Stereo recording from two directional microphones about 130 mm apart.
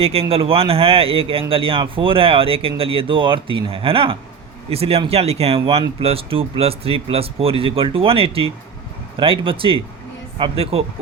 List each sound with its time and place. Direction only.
0.0 s speech: 50° right (ahead or behind)